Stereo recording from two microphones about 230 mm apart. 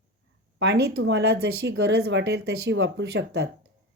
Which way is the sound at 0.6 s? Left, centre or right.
Right.